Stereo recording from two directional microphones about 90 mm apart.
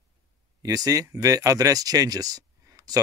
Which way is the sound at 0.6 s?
40° right (ahead or behind).